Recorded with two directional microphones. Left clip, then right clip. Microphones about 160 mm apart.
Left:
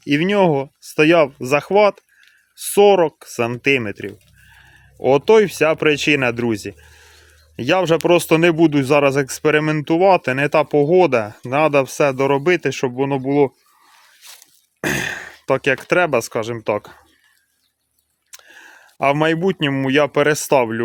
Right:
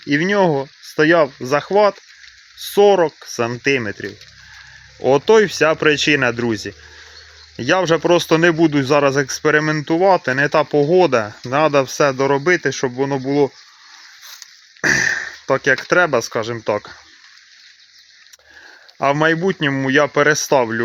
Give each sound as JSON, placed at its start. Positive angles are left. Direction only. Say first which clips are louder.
{"t": 0.1, "sound": "speech", "louder": "even", "side_deg": 35}
{"t": 14.8, "sound": "throat clearing", "louder": "right 6 dB", "side_deg": 50}
{"t": 15.7, "sound": "speech", "louder": "right 3 dB", "side_deg": 30}
{"t": 18.5, "sound": "a sound", "louder": "right 4 dB", "side_deg": 25}
{"t": 19.5, "sound": "speech", "louder": "right 1 dB", "side_deg": 25}